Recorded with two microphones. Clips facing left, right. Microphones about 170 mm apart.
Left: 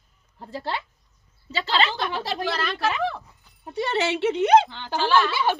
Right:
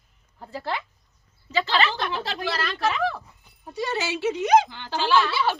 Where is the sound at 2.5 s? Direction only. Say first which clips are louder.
Right 2 dB; centre (ahead or behind).